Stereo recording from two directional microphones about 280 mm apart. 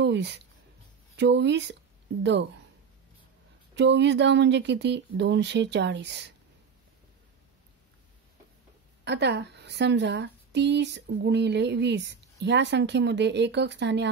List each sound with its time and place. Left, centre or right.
0.0 s a woman's voice: right
3.7 s a woman's voice: right
9.0 s a woman's voice: right